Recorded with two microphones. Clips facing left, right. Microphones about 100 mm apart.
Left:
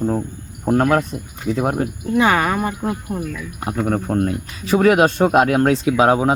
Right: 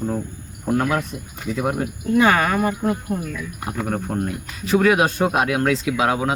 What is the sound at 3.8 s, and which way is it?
Speech, 50° left (ahead or behind).